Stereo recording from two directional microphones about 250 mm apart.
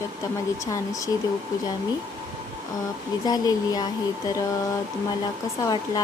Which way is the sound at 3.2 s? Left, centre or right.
Centre.